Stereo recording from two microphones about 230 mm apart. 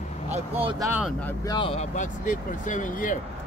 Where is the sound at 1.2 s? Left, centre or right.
Centre; by 3.2 s left.